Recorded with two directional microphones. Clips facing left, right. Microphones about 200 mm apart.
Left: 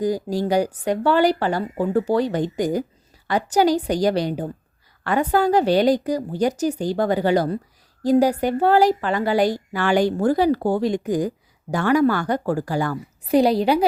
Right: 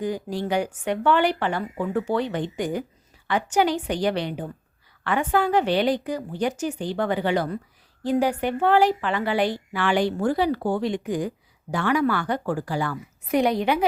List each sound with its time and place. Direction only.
0.0 s speech: 40° left (ahead or behind)